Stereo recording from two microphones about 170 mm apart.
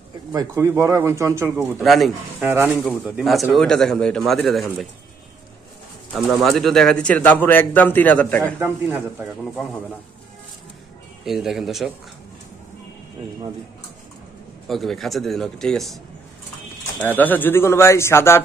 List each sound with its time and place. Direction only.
0.3 s speech: 15° right (ahead or behind)
1.8 s a man's voice: centre (ahead or behind)
2.4 s a man's voice: 10° right (ahead or behind)
6.1 s speech: centre (ahead or behind)
8.5 s speech: 10° right (ahead or behind)
9.4 s a man's voice: centre (ahead or behind)
11.2 s a man's voice: centre (ahead or behind)
14.7 s a man's voice: centre (ahead or behind)
17.0 s speech: 10° left (ahead or behind)